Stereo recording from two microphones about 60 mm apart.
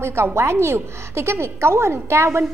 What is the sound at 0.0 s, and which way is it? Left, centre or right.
A woman's voice, right.